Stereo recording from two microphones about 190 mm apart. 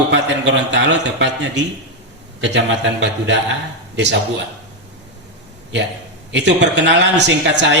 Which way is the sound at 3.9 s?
65° right (ahead or behind).